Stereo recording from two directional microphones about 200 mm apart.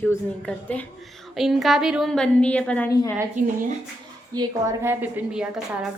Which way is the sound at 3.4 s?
40° right (ahead or behind).